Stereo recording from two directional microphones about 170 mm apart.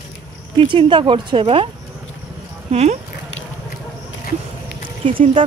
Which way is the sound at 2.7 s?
40° right (ahead or behind).